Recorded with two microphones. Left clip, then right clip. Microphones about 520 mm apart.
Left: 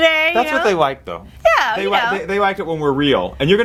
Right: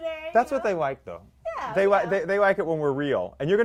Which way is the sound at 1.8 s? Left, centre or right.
Right.